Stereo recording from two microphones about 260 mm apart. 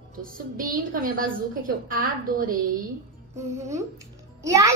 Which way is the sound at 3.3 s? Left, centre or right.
Centre.